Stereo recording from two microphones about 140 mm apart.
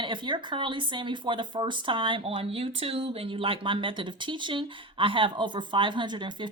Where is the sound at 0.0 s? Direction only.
35° right (ahead or behind).